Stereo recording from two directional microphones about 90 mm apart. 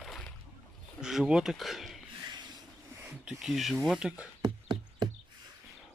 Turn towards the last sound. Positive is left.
turn(degrees=-60)  # may be behind; listen again after turning